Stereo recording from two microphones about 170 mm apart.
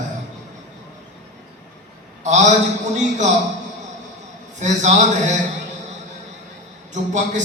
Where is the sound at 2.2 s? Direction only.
45° right (ahead or behind).